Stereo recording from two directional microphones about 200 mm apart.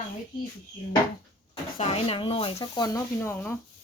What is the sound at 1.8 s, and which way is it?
Speech, 25° left (ahead or behind).